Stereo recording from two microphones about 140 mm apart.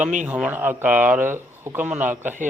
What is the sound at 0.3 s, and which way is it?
Speech, 10° right (ahead or behind).